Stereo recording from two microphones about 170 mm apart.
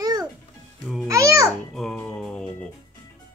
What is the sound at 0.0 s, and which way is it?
Music, 25° right (ahead or behind).